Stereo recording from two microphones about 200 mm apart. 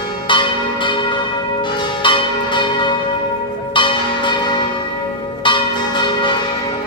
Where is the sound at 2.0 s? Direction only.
25° left (ahead or behind).